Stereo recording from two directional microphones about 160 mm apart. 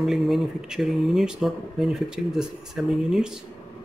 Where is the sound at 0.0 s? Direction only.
Centre (ahead or behind).